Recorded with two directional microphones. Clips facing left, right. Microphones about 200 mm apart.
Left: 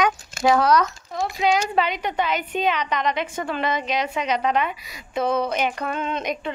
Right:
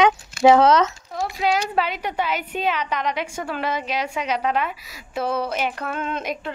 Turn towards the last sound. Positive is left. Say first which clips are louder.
# left 1 dB
turn(degrees=-5)  # may be behind; listen again after turning